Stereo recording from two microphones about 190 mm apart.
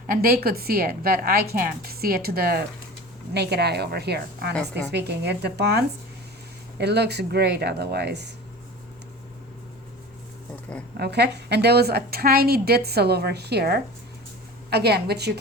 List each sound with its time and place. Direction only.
0.1 s a woman's voice: 50° right (ahead or behind)
10.9 s a woman's voice: 60° right (ahead or behind)